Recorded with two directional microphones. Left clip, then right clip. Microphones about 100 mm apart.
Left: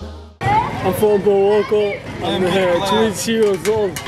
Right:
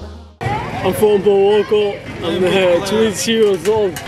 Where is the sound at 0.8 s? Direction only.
20° right (ahead or behind).